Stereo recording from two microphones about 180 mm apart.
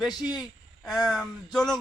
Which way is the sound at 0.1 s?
20° left (ahead or behind).